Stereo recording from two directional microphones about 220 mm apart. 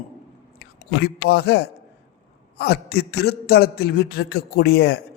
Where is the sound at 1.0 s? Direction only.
45° left (ahead or behind).